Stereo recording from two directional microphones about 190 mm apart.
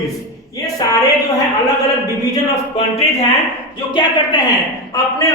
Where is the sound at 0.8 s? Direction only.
20° left (ahead or behind).